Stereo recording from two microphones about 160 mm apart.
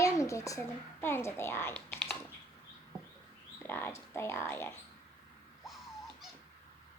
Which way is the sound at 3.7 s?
15° left (ahead or behind).